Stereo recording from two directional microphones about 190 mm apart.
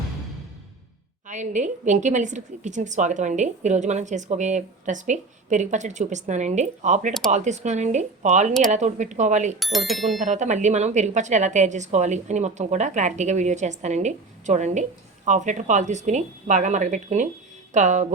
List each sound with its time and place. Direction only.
1.3 s a woman's voice: 40° right (ahead or behind)
9.6 s speech: centre (ahead or behind)
10.2 s a woman's voice: 40° right (ahead or behind)